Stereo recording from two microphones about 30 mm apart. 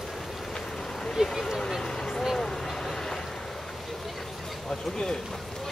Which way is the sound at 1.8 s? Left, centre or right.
Left.